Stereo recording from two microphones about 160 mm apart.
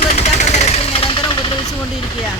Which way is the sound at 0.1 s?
45° left (ahead or behind).